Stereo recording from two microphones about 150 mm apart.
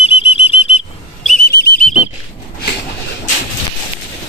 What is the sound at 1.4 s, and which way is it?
Whistle, 90° left.